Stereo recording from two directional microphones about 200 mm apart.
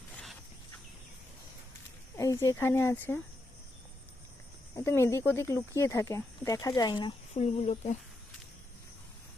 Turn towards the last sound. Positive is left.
turn(degrees=35)  # may be behind; listen again after turning